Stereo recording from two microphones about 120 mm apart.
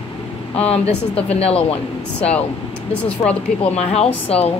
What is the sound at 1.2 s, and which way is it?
Speech, 60° left (ahead or behind).